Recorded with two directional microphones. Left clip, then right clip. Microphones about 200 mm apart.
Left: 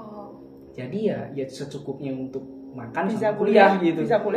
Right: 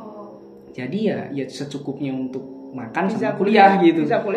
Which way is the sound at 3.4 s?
25° right (ahead or behind).